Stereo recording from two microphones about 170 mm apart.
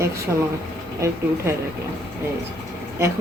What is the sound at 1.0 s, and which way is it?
Speech, 20° right (ahead or behind).